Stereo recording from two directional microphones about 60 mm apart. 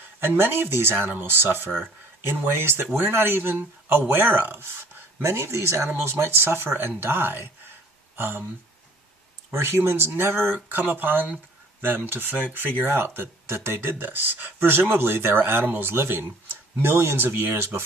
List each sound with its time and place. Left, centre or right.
0.2 s speech: right
5.2 s speech: right
9.5 s speech: right